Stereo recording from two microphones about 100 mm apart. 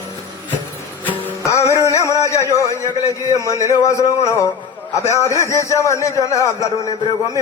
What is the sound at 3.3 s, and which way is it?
A man's voice, 30° left (ahead or behind).